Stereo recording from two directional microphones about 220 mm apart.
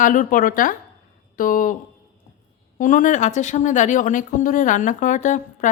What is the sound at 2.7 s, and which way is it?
Speech, 35° left (ahead or behind).